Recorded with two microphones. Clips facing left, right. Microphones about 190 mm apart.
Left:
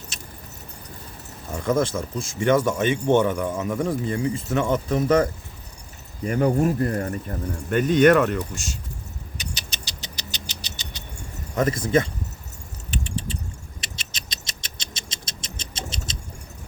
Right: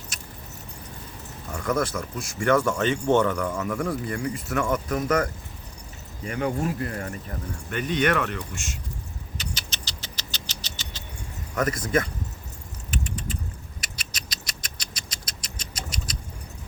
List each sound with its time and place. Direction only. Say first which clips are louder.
0.1 s vehicle: left 2 dB; 25° left (ahead or behind)
1.5 s speech: left 3 dB; 25° left (ahead or behind)
6.2 s speech: left 6 dB; 40° left (ahead or behind)
9.4 s vehicle: even; 15° left (ahead or behind)
11.5 s speech: left 4 dB; 25° left (ahead or behind)
12.9 s keys jangling: left 2 dB; 30° left (ahead or behind)
13.8 s a sound: left 1 dB; 25° left (ahead or behind)